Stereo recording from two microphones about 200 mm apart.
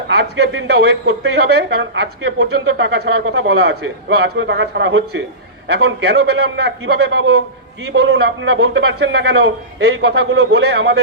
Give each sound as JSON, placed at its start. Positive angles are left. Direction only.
{"t": 0.1, "sound": "a man's voice", "side_deg": -55}
{"t": 2.4, "sound": "a man's voice", "side_deg": -70}